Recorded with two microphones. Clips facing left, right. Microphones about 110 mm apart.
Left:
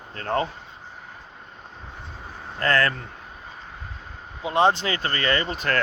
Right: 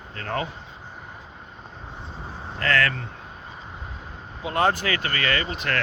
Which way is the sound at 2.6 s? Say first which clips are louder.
Left 1 dB; 35° left (ahead or behind).